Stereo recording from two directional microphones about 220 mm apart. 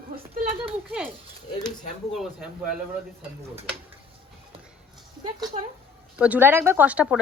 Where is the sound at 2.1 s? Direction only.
5° right (ahead or behind).